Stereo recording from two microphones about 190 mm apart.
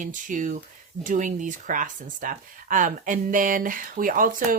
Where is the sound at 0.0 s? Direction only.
45° right (ahead or behind).